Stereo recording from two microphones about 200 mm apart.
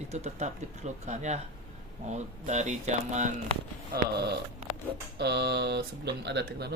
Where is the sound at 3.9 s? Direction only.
55° right (ahead or behind).